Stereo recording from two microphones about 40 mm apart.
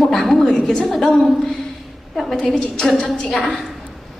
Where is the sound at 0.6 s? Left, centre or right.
Centre.